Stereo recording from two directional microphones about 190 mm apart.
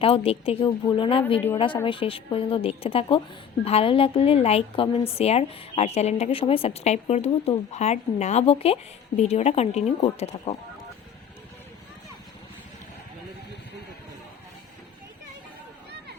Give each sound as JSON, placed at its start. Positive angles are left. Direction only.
{"t": 0.0, "sound": "a woman's voice", "side_deg": 30}